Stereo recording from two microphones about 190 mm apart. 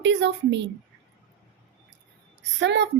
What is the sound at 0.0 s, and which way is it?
Speech, 65° right (ahead or behind).